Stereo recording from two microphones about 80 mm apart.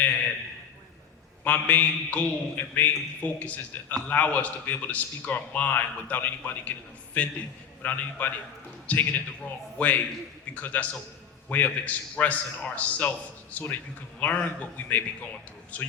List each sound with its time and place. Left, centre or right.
1.5 s a man's voice: left